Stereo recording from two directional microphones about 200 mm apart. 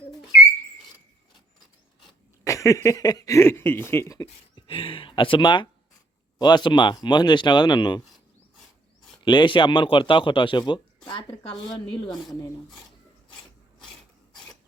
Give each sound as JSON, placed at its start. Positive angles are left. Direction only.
{"t": 2.0, "sound": "a man's voice", "side_deg": 15}
{"t": 9.1, "sound": "a man's voice", "side_deg": 25}